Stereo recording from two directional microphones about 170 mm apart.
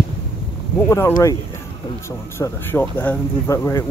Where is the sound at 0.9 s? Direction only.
15° left (ahead or behind).